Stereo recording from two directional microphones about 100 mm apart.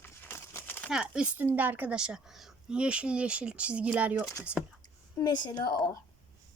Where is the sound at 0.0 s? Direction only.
25° left (ahead or behind).